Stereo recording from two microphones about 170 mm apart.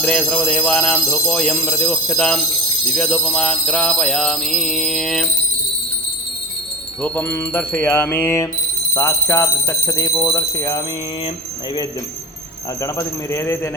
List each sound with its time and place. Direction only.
0.0 s speech: 5° left (ahead or behind)
2.9 s mantra: 5° left (ahead or behind)
7.0 s speech: 10° left (ahead or behind)
12.8 s speech: 15° left (ahead or behind)